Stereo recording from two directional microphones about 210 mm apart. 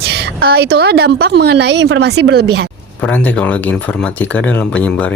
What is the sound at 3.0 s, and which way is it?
Speech, 5° left (ahead or behind).